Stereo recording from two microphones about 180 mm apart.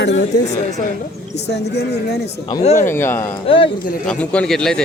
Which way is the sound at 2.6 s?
40° left (ahead or behind).